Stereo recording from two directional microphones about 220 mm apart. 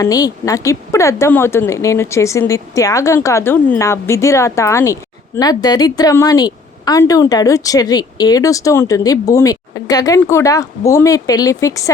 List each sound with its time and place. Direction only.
0.0 s a woman's voice: 15° left (ahead or behind)